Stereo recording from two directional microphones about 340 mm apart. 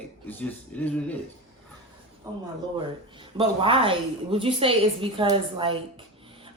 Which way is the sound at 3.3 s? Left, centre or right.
Centre.